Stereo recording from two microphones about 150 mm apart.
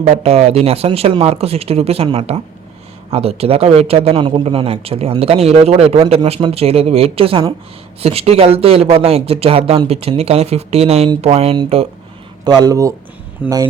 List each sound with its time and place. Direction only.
0.0 s speech: 45° right (ahead or behind)
12.5 s speech: 25° right (ahead or behind)
13.4 s speech: 10° right (ahead or behind)